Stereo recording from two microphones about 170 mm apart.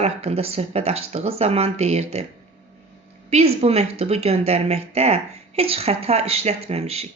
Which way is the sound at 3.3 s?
35° right (ahead or behind).